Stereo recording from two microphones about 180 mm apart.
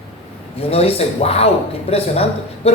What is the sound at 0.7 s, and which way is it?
A man's voice, 35° left (ahead or behind).